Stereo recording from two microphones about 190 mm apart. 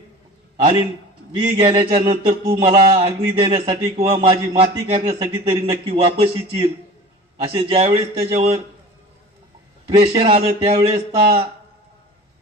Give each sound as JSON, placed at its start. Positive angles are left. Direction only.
{"t": 1.3, "sound": "speech", "side_deg": -25}
{"t": 10.1, "sound": "speech", "side_deg": -30}